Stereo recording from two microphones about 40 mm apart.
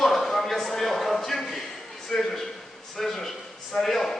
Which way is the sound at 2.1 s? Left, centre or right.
Centre.